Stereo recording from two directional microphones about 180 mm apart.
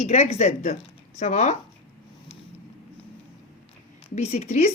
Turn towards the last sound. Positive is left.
turn(degrees=35)  # may be behind; listen again after turning